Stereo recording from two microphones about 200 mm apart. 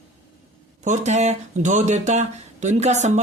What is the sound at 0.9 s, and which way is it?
Speech, 35° right (ahead or behind).